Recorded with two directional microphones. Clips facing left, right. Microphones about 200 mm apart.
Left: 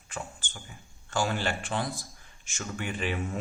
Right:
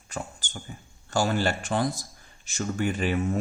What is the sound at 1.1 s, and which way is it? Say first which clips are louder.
Speech: right 4 dB; 40° right (ahead or behind).